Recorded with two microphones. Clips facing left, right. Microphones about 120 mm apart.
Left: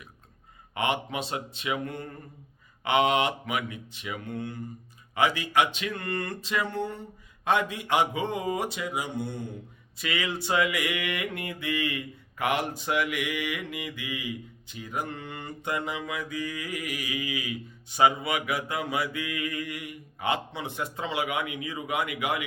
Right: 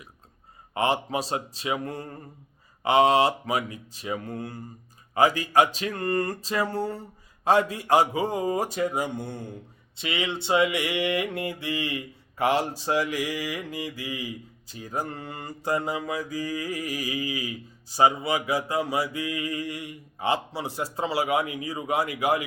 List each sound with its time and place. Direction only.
0.7 s mantra: 35° right (ahead or behind)
10.0 s mantra: 25° right (ahead or behind)